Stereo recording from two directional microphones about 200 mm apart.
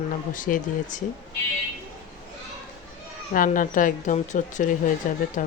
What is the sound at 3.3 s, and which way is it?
Speech, 45° left (ahead or behind).